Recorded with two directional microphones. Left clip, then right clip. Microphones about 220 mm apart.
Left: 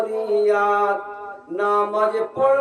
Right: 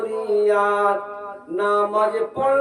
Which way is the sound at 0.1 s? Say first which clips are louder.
Right 2 dB; 10° right (ahead or behind).